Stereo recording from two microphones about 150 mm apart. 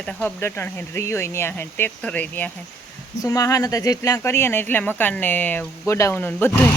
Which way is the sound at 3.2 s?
20° left (ahead or behind).